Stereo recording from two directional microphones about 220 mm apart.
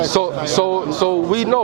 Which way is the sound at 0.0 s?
25° right (ahead or behind).